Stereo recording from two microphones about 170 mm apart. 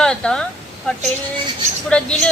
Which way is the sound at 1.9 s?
5° left (ahead or behind).